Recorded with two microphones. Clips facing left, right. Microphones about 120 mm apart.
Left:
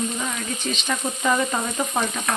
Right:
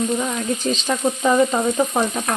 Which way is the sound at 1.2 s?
20° right (ahead or behind).